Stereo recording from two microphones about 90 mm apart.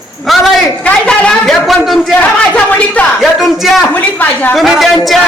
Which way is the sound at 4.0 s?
20° left (ahead or behind).